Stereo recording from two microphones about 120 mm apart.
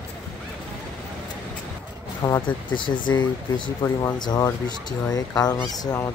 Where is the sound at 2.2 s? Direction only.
25° left (ahead or behind).